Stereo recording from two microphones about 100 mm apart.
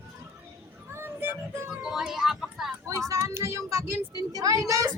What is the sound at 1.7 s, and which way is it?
Speech, 5° right (ahead or behind).